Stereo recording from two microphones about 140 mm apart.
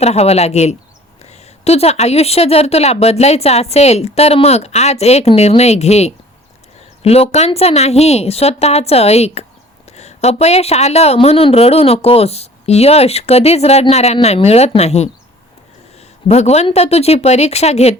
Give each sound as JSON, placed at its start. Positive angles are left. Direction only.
{"t": 0.0, "sound": "a woman's voice", "side_deg": 50}